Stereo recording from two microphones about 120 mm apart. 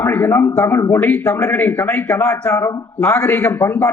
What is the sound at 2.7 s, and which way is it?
A man's voice, 25° left (ahead or behind).